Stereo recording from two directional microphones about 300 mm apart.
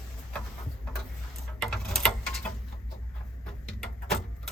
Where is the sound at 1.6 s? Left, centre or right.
Centre.